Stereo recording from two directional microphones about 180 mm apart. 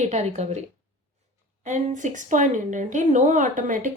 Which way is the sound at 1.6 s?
45° right (ahead or behind).